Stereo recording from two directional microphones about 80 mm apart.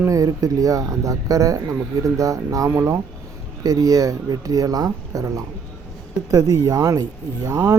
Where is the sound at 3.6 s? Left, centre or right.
Right.